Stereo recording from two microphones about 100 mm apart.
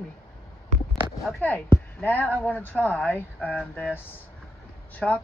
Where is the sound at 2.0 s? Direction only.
20° left (ahead or behind).